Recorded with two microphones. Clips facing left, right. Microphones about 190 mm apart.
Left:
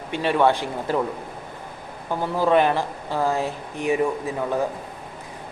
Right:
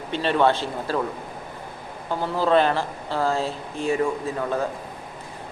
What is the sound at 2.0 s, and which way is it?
Speech, 15° left (ahead or behind).